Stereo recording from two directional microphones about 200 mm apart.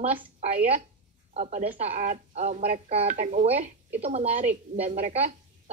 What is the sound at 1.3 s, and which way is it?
A woman's voice, 35° right (ahead or behind).